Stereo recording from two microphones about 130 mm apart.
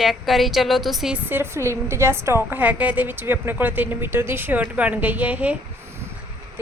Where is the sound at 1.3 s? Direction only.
20° right (ahead or behind).